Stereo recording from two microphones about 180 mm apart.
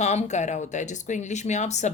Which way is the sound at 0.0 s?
40° left (ahead or behind).